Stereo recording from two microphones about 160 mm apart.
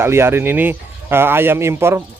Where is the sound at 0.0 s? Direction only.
15° right (ahead or behind).